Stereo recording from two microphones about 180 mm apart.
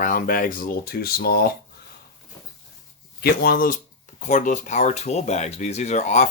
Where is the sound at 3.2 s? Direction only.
55° left (ahead or behind).